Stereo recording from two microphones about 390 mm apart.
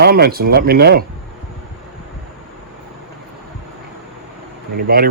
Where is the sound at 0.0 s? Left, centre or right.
Right.